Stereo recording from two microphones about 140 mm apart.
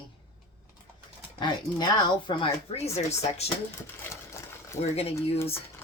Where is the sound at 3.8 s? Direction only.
20° left (ahead or behind).